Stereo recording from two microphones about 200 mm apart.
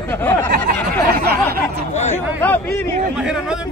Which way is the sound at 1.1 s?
50° right (ahead or behind).